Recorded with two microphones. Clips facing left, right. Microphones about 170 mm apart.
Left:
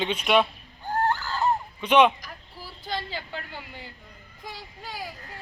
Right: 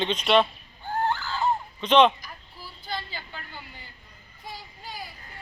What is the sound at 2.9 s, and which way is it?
Vehicle, 90° left.